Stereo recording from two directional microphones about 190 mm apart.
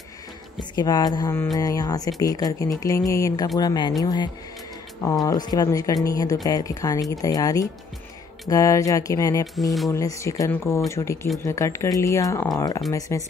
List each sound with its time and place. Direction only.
0.6 s speech: 20° left (ahead or behind)